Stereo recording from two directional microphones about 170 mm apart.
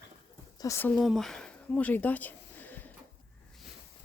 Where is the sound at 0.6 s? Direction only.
15° left (ahead or behind).